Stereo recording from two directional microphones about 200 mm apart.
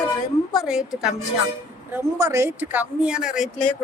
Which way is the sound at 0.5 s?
Centre (ahead or behind).